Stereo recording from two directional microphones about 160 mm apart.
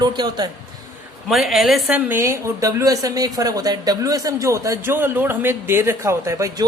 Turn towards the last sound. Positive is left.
turn(degrees=-20)  # may be behind; listen again after turning